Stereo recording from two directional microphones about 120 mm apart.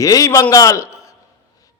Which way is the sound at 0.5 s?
30° left (ahead or behind).